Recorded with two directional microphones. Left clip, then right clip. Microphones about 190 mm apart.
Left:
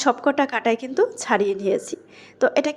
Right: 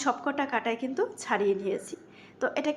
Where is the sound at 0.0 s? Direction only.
35° left (ahead or behind).